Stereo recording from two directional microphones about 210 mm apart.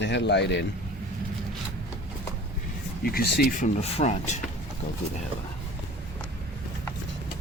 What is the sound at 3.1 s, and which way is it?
Speech, 45° left (ahead or behind).